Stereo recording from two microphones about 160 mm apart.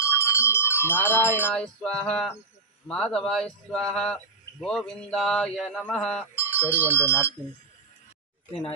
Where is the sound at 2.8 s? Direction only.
5° left (ahead or behind).